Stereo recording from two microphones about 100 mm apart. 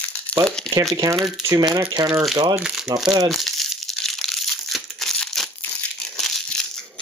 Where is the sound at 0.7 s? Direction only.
5° left (ahead or behind).